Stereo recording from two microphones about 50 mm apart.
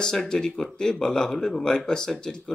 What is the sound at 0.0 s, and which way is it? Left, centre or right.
Speech, centre.